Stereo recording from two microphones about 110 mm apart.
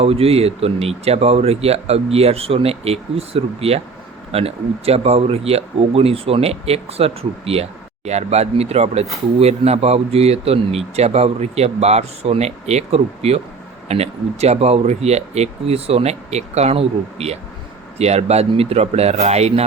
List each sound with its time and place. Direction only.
0.0 s speech: 60° right (ahead or behind)